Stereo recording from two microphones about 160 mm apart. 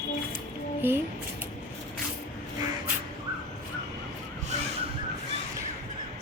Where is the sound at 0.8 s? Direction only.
15° right (ahead or behind).